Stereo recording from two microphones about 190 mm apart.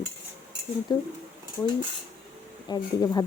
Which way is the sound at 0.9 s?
20° left (ahead or behind).